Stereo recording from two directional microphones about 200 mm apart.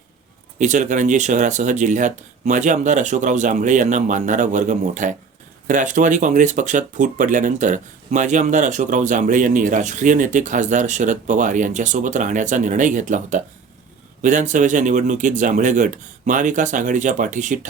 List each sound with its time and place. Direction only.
0.6 s speech: 35° right (ahead or behind)